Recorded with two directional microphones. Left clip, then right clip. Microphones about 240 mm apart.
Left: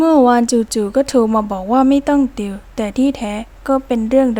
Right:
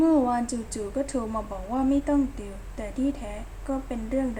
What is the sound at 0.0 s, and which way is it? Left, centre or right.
A woman's voice, left.